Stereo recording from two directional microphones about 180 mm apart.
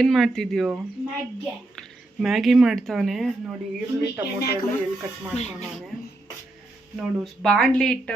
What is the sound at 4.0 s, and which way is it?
Speech, 60° left (ahead or behind).